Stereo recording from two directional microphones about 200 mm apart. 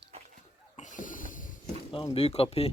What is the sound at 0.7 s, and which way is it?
Snort, 40° left (ahead or behind).